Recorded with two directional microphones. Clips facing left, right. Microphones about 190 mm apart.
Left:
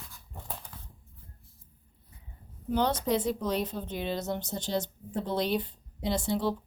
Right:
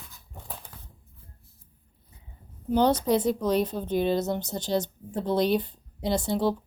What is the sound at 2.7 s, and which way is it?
Speech, 35° right (ahead or behind).